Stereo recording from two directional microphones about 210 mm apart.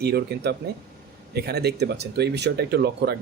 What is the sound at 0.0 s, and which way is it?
Speech, 50° right (ahead or behind).